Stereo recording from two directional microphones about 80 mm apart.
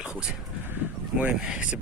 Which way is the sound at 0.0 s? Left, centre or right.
Centre.